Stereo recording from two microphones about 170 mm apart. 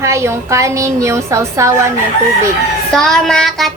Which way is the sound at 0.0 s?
15° right (ahead or behind).